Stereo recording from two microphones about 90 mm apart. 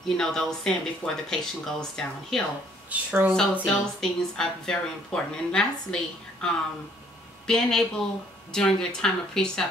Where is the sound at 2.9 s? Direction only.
15° right (ahead or behind).